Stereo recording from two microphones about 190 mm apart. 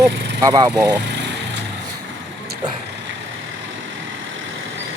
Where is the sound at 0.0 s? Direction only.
20° right (ahead or behind).